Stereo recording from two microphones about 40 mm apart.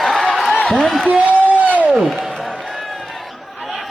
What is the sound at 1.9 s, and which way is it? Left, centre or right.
Speech, centre.